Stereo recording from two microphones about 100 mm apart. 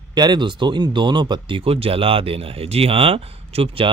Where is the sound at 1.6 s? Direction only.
70° right (ahead or behind).